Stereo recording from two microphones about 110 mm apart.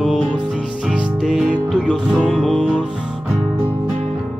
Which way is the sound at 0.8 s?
Centre (ahead or behind).